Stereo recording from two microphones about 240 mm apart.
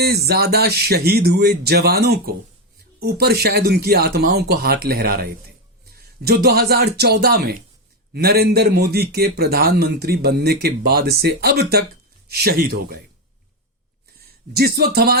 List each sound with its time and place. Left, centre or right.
0.0 s a man's voice: right
14.2 s speech: right